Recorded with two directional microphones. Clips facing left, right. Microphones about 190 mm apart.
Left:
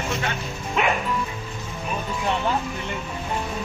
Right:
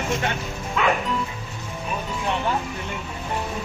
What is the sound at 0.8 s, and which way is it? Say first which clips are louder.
Music: right 1 dB; 20° left (ahead or behind).